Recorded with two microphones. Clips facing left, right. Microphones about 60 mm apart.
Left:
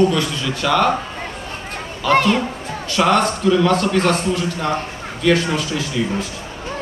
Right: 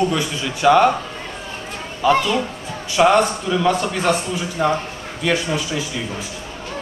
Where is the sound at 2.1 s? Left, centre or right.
Left.